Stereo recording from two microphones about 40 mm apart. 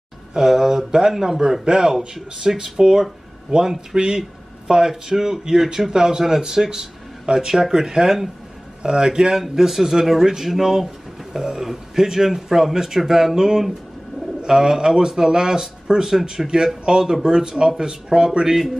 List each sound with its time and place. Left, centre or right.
0.3 s a man's voice: centre
7.3 s a man's voice: centre